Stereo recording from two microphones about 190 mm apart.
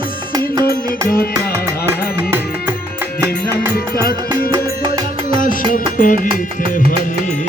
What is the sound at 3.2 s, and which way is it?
Music, 15° right (ahead or behind).